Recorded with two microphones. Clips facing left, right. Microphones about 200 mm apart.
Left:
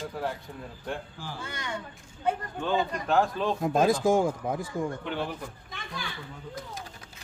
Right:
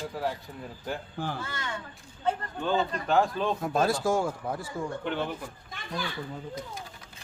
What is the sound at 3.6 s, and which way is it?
Speech, 15° left (ahead or behind).